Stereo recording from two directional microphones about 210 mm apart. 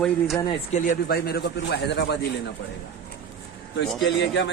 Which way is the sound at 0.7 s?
45° left (ahead or behind).